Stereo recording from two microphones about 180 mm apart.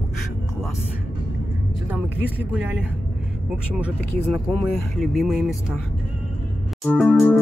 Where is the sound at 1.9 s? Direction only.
10° right (ahead or behind).